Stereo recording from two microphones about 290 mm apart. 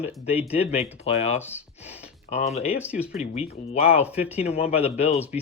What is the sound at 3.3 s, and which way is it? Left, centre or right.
Speech, left.